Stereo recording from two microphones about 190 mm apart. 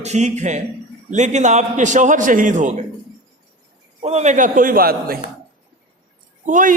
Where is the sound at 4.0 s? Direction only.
35° right (ahead or behind); by 5.2 s 50° right (ahead or behind).